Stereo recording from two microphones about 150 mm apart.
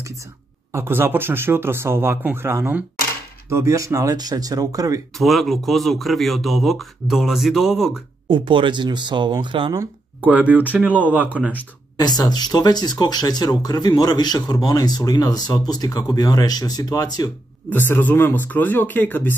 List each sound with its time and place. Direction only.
0.0 s speech: 20° right (ahead or behind)
5.1 s speech: centre (ahead or behind)
8.3 s speech: 35° right (ahead or behind)
9.8 s speech: 10° right (ahead or behind)
12.0 s speech: 25° left (ahead or behind)
17.6 s speech: 15° left (ahead or behind)